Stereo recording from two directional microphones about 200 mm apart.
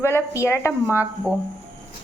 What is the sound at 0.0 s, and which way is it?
Speech, 10° left (ahead or behind).